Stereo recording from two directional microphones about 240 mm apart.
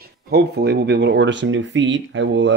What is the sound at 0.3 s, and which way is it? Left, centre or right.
Speech, right.